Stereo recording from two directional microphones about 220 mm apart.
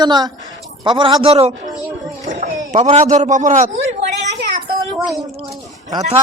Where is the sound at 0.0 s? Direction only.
20° right (ahead or behind); by 3.7 s 35° right (ahead or behind).